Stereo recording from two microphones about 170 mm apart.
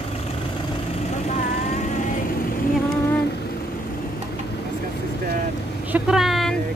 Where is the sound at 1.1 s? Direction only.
45° left (ahead or behind).